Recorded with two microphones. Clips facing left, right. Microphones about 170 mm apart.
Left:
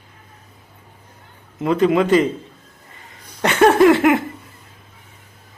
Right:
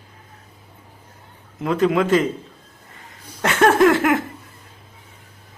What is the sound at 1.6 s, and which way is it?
Speech, centre (ahead or behind).